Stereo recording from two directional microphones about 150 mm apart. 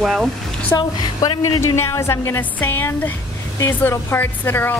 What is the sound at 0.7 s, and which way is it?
A woman's voice, 25° left (ahead or behind).